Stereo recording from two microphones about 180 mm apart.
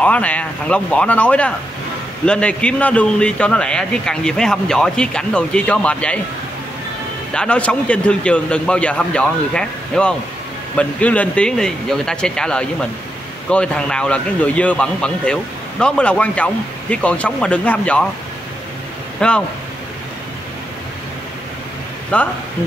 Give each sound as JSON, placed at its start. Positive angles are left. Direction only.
{"t": 0.0, "sound": "a man's voice", "side_deg": 10}
{"t": 7.3, "sound": "a man's voice", "side_deg": 5}
{"t": 19.1, "sound": "speech", "side_deg": 5}
{"t": 22.1, "sound": "speech", "side_deg": 5}